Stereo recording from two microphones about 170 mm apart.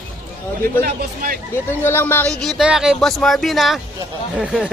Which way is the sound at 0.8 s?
60° right (ahead or behind).